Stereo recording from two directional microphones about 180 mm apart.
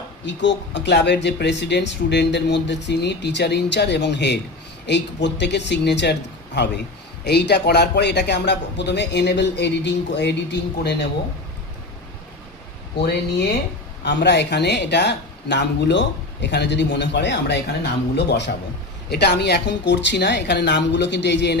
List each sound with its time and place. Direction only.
0.3 s speech: 80° left
14.0 s speech: 70° left (ahead or behind)